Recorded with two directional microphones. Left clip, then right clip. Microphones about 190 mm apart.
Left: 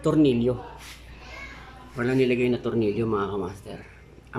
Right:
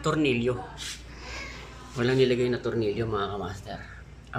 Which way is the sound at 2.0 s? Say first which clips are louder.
Left 1 dB; centre (ahead or behind).